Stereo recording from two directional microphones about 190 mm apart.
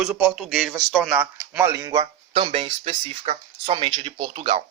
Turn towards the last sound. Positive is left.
turn(degrees=-30)  # may be behind; listen again after turning